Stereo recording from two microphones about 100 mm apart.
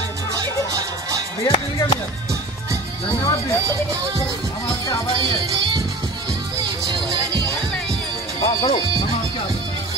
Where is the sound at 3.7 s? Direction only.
35° right (ahead or behind).